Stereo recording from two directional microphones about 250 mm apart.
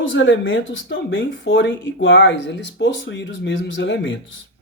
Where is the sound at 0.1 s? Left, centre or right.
Left.